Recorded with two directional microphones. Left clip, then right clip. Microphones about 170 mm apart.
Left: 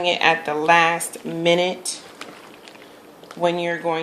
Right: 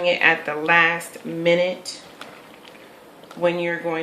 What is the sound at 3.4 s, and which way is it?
Speech, 40° left (ahead or behind).